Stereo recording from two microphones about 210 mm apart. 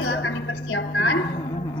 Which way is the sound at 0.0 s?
70° left (ahead or behind).